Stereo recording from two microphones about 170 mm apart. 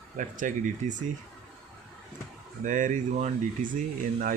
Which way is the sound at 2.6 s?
50° right (ahead or behind).